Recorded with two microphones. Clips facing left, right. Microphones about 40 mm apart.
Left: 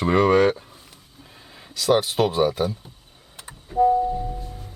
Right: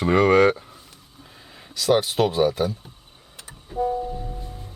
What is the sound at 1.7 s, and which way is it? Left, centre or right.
Speech, centre.